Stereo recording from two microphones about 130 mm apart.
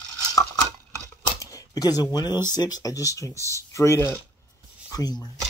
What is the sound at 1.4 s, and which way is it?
Speech, 25° left (ahead or behind).